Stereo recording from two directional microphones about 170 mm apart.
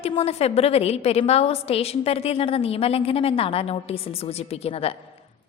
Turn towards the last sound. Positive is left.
turn(degrees=35)  # may be behind; listen again after turning